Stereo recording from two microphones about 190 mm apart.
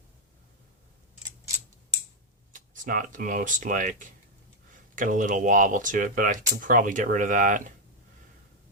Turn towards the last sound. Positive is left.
turn(degrees=-45)  # may be behind; listen again after turning